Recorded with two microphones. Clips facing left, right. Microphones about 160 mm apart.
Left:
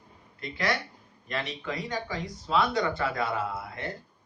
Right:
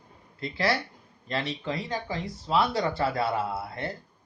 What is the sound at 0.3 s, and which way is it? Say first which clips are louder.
Speech: right 3 dB; 30° right (ahead or behind).